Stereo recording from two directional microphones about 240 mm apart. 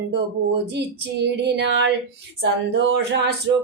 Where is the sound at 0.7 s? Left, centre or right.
Right.